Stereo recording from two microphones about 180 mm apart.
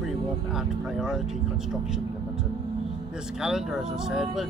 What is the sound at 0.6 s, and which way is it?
Vehicle, 5° right (ahead or behind).